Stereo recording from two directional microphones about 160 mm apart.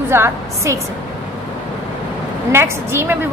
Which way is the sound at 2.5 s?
15° right (ahead or behind).